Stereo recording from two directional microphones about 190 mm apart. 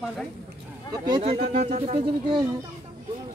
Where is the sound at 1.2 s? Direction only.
35° right (ahead or behind).